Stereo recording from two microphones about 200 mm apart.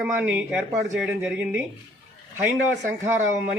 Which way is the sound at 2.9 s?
10° right (ahead or behind).